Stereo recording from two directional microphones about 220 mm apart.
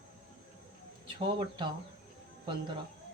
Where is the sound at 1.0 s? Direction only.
20° right (ahead or behind).